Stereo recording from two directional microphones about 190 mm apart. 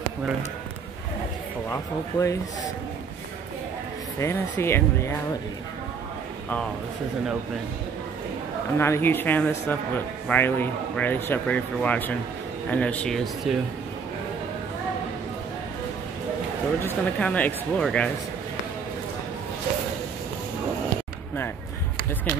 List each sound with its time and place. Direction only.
1.7 s speech: 15° left (ahead or behind)
4.2 s speech: 15° left (ahead or behind)
8.7 s speech: 15° left (ahead or behind)
16.8 s speech: 5° left (ahead or behind)